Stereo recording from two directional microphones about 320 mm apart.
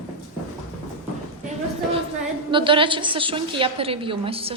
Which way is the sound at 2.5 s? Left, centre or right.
Centre.